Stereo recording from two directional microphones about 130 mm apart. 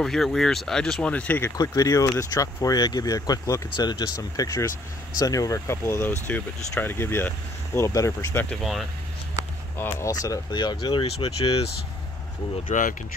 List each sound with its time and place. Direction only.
0.0 s speech: centre (ahead or behind)
1.6 s speech: 25° left (ahead or behind)
8.5 s speech: centre (ahead or behind)
9.8 s speech: 20° left (ahead or behind); by 11.7 s 50° left (ahead or behind)
12.6 s speech: 90° left